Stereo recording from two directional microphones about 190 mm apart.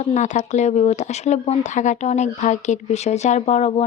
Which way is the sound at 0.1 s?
40° left (ahead or behind).